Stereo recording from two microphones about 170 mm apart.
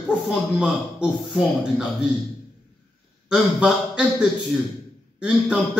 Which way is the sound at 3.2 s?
5° right (ahead or behind).